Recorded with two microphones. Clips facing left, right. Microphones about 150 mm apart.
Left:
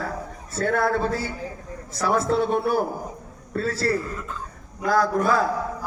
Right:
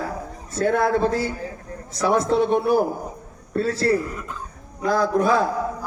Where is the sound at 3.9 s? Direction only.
15° right (ahead or behind).